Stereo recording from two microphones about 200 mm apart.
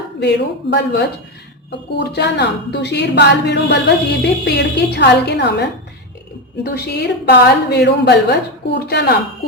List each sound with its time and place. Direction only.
0.2 s a woman's voice: 60° left (ahead or behind)
2.1 s a woman's voice: 60° left (ahead or behind)